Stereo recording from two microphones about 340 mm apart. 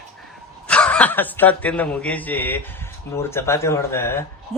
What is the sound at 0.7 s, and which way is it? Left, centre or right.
Speech, centre.